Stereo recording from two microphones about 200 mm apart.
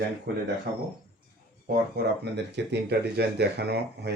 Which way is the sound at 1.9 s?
55° right (ahead or behind).